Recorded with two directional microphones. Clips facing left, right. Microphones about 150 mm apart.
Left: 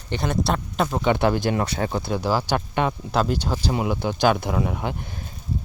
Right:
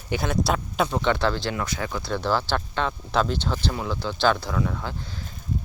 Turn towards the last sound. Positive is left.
turn(degrees=20)  # may be behind; listen again after turning